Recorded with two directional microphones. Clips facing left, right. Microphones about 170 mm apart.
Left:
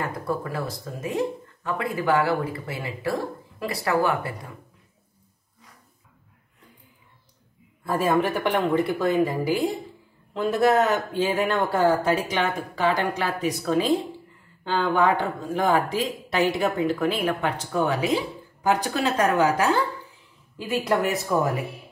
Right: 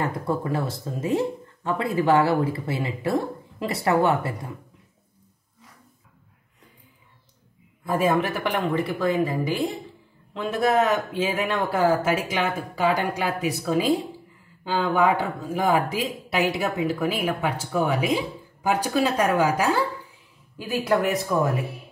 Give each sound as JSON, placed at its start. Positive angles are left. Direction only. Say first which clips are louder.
{"t": 0.0, "sound": "speech", "louder": "right 2 dB", "side_deg": -25}
{"t": 7.8, "sound": "a man's voice", "louder": "even", "side_deg": -10}
{"t": 20.9, "sound": "speech", "louder": "right 1 dB", "side_deg": 0}